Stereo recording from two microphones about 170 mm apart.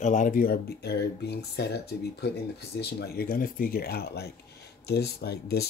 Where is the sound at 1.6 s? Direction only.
75° left (ahead or behind).